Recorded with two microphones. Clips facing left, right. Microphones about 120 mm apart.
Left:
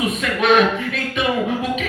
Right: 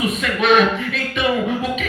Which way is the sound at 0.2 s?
45° left (ahead or behind).